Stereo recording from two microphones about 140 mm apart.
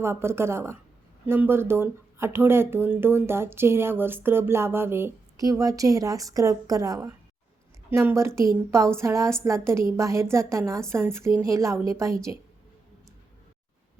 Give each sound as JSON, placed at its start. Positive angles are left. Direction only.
{"t": 0.0, "sound": "a woman's voice", "side_deg": -20}